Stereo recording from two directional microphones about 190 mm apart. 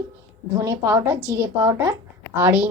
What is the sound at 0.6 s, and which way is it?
A woman's voice, 15° right (ahead or behind).